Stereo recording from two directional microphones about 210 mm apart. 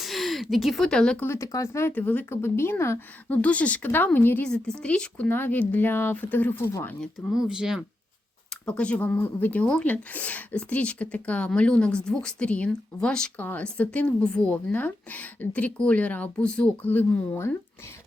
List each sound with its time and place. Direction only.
0.0 s speech: centre (ahead or behind)